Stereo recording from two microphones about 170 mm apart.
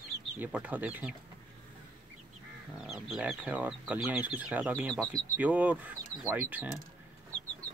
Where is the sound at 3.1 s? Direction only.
5° right (ahead or behind).